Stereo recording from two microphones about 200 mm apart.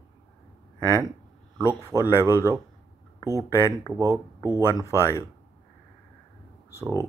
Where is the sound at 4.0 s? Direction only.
15° right (ahead or behind).